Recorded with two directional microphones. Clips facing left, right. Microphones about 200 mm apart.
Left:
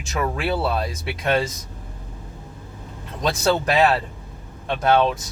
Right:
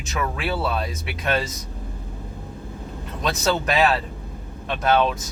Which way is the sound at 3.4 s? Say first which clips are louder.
Left 2 dB; 30° left (ahead or behind).